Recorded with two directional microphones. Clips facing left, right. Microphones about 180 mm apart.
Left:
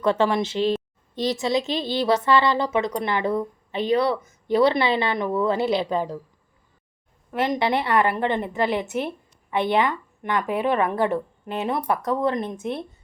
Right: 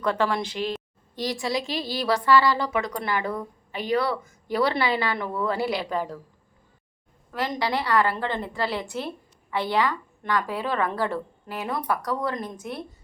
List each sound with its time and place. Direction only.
0.0 s a woman's voice: 25° left (ahead or behind)
7.3 s a woman's voice: 20° left (ahead or behind)